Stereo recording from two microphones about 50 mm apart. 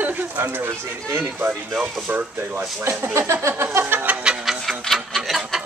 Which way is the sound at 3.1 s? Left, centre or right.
Right.